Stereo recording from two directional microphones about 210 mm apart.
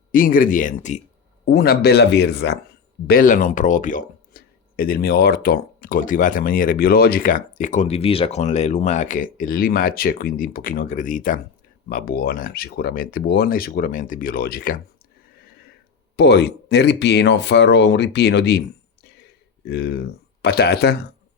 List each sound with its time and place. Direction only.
0.1 s speech: 40° left (ahead or behind)
1.5 s speech: 45° left (ahead or behind)
3.1 s speech: 40° left (ahead or behind)
16.1 s speech: 55° left (ahead or behind)
19.6 s speech: 50° left (ahead or behind)